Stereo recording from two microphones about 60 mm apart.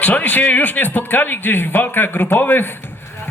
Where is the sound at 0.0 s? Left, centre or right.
Left.